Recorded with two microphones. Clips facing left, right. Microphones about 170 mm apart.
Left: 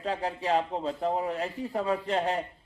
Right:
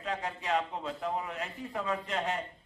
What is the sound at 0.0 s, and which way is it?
A man's voice, 30° left (ahead or behind).